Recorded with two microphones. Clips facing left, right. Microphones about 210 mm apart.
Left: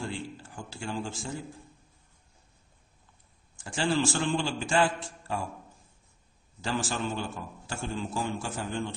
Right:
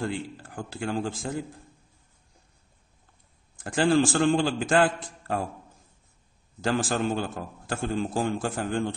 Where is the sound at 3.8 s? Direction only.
50° right (ahead or behind).